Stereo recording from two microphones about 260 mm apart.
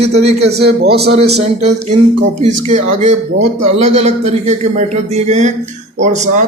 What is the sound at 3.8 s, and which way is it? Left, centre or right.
A man's voice, right.